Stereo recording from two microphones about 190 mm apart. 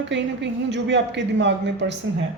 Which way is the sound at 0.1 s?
70° right (ahead or behind).